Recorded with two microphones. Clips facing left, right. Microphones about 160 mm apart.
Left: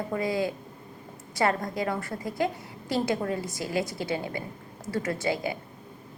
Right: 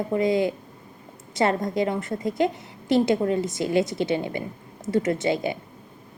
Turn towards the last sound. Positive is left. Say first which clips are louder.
# right 5 dB
turn(degrees=-25)  # may be behind; listen again after turning